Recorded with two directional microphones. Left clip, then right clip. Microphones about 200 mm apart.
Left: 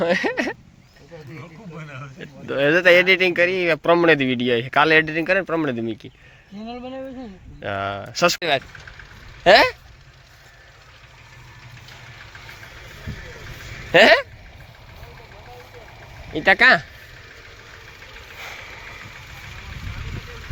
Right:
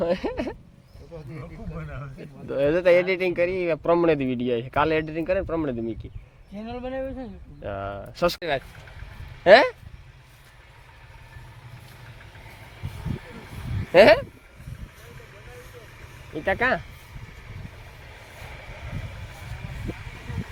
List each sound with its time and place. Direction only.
0.0 s speech: 10° left (ahead or behind)
1.7 s a sound: 50° right (ahead or behind)
2.2 s speech: centre (ahead or behind)
6.8 s speech: 25° left (ahead or behind)
7.6 s speech: 10° left (ahead or behind)
9.4 s speech: 5° left (ahead or behind)
13.9 s speech: 10° left (ahead or behind)
16.3 s speech: 20° left (ahead or behind)